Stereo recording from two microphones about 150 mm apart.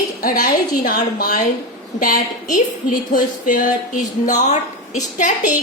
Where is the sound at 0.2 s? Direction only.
75° left (ahead or behind); by 5.3 s 55° left (ahead or behind).